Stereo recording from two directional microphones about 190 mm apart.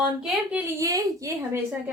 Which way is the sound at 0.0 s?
5° right (ahead or behind).